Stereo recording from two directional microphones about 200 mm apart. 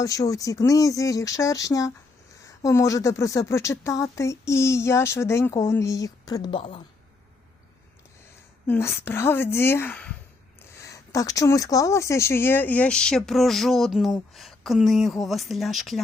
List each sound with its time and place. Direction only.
0.0 s speech: 15° left (ahead or behind)
8.6 s speech: 10° left (ahead or behind)